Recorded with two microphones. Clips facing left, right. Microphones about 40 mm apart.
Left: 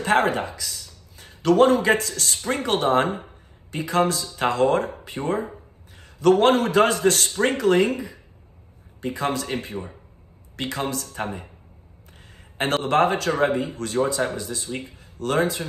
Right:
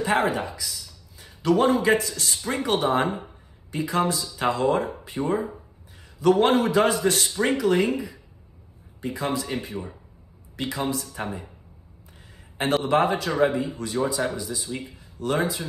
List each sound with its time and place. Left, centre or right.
0.0 s speech: left
12.5 s speech: left